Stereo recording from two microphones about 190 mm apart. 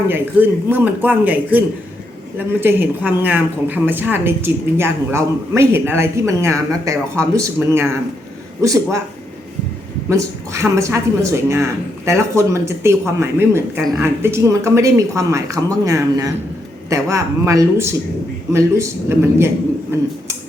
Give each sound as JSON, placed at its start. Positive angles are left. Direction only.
{"t": 0.1, "sound": "speech", "side_deg": -10}
{"t": 10.1, "sound": "speech", "side_deg": -15}